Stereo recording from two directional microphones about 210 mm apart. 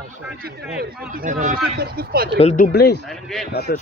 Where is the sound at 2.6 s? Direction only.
50° left (ahead or behind).